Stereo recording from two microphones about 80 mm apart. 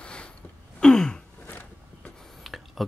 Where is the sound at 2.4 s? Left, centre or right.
Centre.